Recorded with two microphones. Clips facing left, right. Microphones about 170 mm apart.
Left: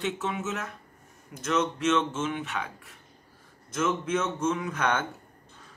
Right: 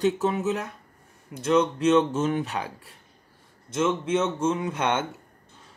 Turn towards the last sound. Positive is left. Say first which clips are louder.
# right 2 dB
turn(degrees=-25)  # may be behind; listen again after turning